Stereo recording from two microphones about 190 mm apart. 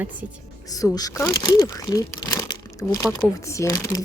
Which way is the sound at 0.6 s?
20° left (ahead or behind).